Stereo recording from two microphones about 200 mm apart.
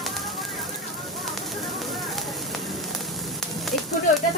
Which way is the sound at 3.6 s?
Centre (ahead or behind).